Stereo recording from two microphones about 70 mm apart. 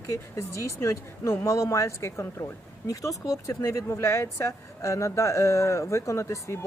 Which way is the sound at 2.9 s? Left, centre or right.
Left.